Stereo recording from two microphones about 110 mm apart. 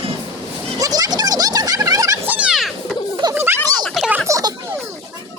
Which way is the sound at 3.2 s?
40° right (ahead or behind).